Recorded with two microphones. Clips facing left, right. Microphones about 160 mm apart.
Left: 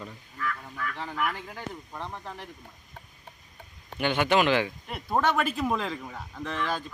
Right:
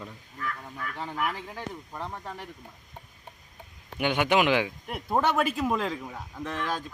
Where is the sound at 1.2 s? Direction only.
5° right (ahead or behind).